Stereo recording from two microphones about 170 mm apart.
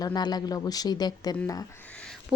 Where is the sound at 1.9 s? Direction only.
5° left (ahead or behind).